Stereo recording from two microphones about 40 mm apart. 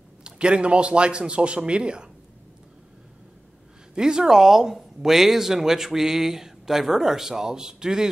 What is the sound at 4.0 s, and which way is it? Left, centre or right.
Speech, centre.